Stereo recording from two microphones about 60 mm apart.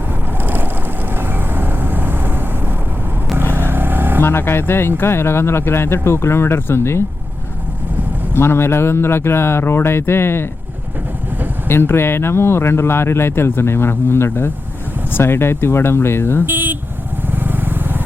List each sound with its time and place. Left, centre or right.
0.3 s vehicle: right
3.5 s vehicle: right
4.2 s speech: left
8.3 s speech: left
11.7 s speech: left
16.5 s vehicle: right